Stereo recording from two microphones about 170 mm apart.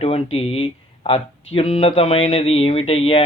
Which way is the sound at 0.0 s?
35° left (ahead or behind).